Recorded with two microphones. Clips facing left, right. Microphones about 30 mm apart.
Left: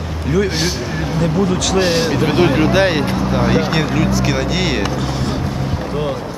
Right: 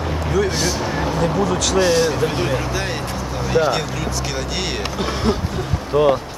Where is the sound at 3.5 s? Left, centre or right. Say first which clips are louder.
Left 2 dB; left.